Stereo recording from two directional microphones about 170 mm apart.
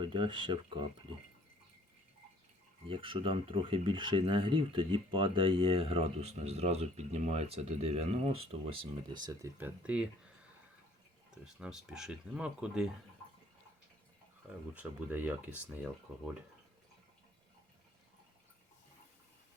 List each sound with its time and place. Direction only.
0.0 s speech: 30° right (ahead or behind)
2.8 s speech: 30° right (ahead or behind)
9.6 s speech: 10° right (ahead or behind)
11.4 s speech: 5° right (ahead or behind)
14.8 s speech: 10° right (ahead or behind)